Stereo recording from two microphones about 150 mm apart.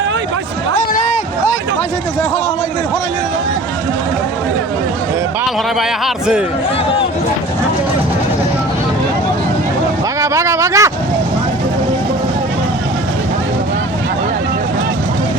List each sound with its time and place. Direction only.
10.2 s speech: 20° right (ahead or behind)